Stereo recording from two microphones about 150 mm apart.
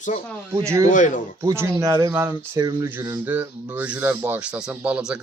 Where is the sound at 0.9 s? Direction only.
60° left (ahead or behind).